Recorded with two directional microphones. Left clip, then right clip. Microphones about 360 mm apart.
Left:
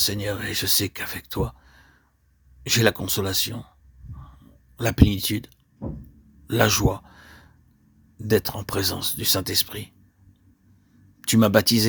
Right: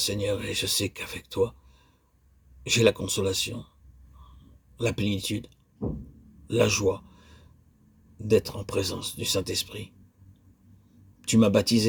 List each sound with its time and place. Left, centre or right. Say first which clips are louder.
0.0 s speech: left 2 dB; left
4.8 s speech: left 6 dB; left
6.5 s a sound: left 2 dB; left
8.2 s speech: left 1 dB; left
11.2 s speech: left 3 dB; left